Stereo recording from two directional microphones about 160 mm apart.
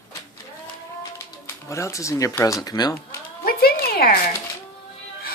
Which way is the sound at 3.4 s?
70° left (ahead or behind).